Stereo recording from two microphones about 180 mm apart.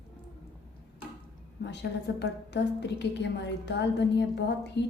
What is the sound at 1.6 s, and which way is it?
Speech, 75° left (ahead or behind).